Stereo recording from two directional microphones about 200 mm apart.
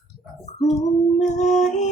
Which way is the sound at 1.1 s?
35° left (ahead or behind).